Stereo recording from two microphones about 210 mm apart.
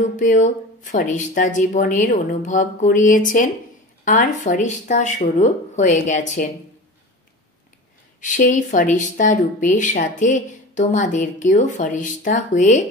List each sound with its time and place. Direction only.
0.0 s speech: 35° left (ahead or behind)
8.2 s speech: 35° left (ahead or behind)